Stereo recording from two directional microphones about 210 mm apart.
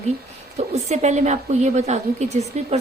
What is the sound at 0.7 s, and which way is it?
Speech, 30° right (ahead or behind).